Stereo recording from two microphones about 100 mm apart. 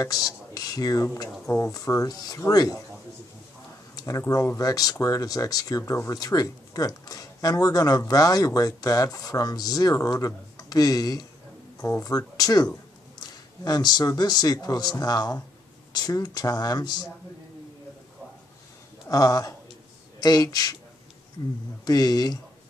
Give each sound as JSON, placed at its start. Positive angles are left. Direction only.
{"t": 0.0, "sound": "speech", "side_deg": 40}
{"t": 3.9, "sound": "a sound", "side_deg": 35}
{"t": 4.3, "sound": "speech", "side_deg": 35}
{"t": 13.7, "sound": "speech", "side_deg": 40}
{"t": 19.0, "sound": "speech", "side_deg": 35}
{"t": 21.8, "sound": "speech", "side_deg": 40}